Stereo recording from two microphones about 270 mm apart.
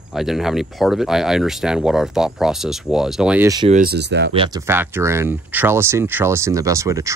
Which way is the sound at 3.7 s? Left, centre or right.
Right.